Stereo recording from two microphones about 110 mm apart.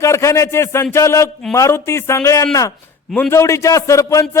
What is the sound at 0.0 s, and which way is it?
A man's voice, 25° left (ahead or behind).